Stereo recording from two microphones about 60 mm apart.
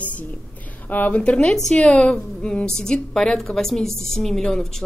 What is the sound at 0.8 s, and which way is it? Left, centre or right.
Speech, left.